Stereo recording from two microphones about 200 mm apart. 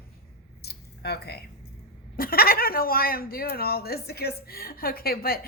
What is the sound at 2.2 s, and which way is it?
Speech, 50° left (ahead or behind).